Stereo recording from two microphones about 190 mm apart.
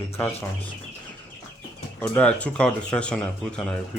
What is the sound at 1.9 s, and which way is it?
Speech, 10° left (ahead or behind).